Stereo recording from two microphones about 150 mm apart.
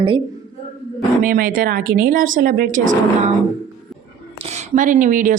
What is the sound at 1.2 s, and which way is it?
Speech, 70° right (ahead or behind).